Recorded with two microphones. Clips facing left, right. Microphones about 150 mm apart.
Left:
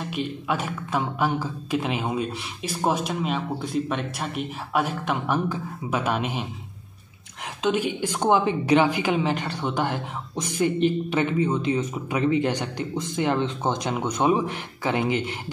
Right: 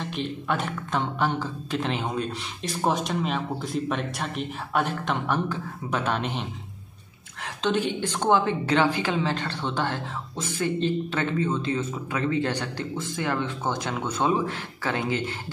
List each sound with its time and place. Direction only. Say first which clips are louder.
0.0 s a woman's voice: left 1 dB; 5° left (ahead or behind)
7.6 s a woman's voice: left 1 dB; 10° left (ahead or behind)